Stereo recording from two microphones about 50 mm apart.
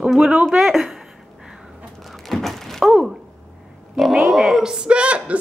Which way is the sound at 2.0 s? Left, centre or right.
Centre.